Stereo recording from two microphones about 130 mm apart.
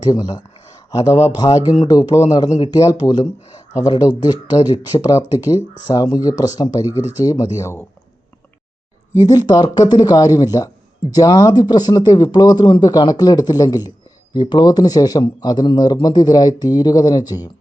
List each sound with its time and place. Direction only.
0.0 s speech: 30° left (ahead or behind)
9.1 s speech: 30° left (ahead or behind)